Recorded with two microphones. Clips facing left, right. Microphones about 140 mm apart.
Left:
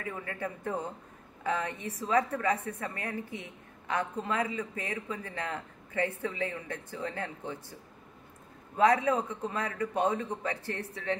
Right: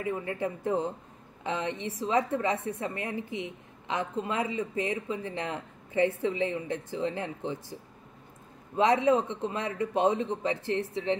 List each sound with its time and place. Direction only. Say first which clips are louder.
0.0 s a woman's voice: right 6 dB; 20° right (ahead or behind)
8.7 s a woman's voice: right 2 dB; 25° right (ahead or behind)